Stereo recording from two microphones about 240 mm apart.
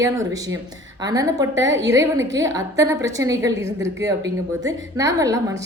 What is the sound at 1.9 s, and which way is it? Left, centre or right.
A woman's voice, centre.